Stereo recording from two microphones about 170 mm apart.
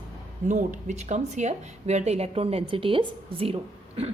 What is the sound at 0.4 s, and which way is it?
A woman's voice, 45° right (ahead or behind).